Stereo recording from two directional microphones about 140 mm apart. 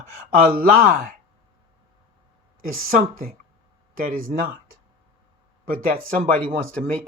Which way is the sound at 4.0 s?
75° right (ahead or behind).